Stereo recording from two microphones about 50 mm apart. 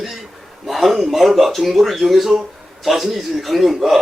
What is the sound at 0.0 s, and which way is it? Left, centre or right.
A man's voice, centre.